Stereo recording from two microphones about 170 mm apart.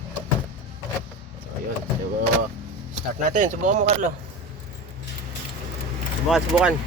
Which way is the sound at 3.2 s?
45° right (ahead or behind).